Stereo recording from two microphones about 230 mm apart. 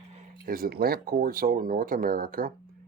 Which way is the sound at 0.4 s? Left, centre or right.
Right.